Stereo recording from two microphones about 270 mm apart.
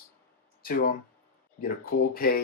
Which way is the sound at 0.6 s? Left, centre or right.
Left.